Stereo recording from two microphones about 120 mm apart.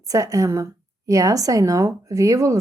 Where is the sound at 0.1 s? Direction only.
25° right (ahead or behind).